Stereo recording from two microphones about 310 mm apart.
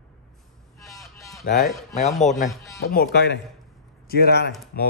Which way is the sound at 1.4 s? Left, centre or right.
Left.